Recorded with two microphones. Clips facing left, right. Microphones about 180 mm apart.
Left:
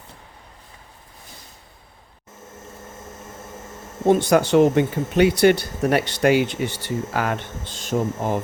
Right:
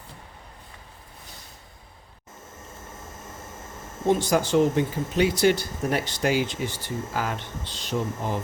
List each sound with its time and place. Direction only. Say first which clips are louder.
4.0 s speech: left 5 dB; 55° left (ahead or behind)